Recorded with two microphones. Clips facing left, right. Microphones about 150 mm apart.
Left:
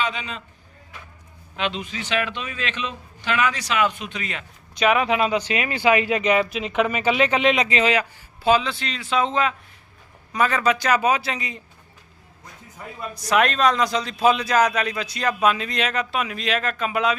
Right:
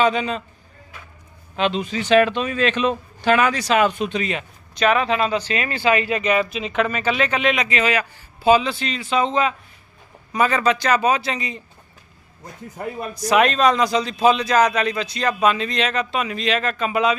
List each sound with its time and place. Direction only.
0.0 s a man's voice: 40° right (ahead or behind)
1.5 s a man's voice: 35° right (ahead or behind)
4.7 s speech: 10° left (ahead or behind)
8.4 s a man's voice: 5° right (ahead or behind)
10.6 s speech: 10° left (ahead or behind)
12.7 s speech: 65° right (ahead or behind)
13.2 s a man's voice: centre (ahead or behind)